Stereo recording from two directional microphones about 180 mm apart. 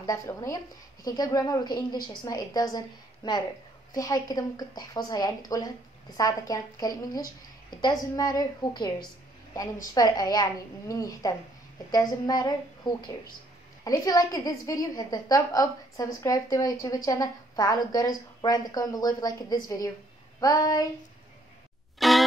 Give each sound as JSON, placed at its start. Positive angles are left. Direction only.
{"t": 0.0, "sound": "a woman's voice", "side_deg": 20}
{"t": 3.9, "sound": "a woman's voice", "side_deg": 20}
{"t": 9.9, "sound": "a woman's voice", "side_deg": 20}
{"t": 21.9, "sound": "music", "side_deg": 0}